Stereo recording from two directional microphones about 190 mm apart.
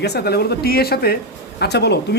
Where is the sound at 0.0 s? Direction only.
60° left (ahead or behind).